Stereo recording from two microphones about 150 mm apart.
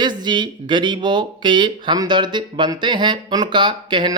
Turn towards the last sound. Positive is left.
turn(degrees=-30)  # may be behind; listen again after turning